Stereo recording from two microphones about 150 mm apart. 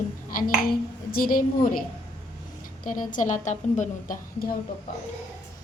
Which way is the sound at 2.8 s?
60° left (ahead or behind).